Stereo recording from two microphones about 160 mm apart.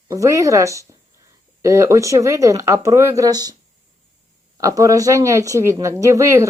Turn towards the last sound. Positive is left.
turn(degrees=-20)  # may be behind; listen again after turning